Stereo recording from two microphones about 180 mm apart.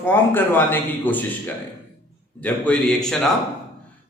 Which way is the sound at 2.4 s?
5° left (ahead or behind).